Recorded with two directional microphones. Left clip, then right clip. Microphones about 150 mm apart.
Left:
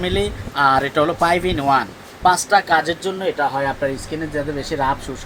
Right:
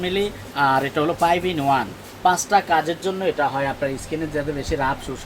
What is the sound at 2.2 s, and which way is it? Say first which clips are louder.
Speech: left 3 dB; 25° left (ahead or behind).